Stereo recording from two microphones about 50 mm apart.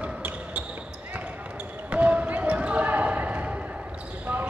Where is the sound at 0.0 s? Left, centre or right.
Right.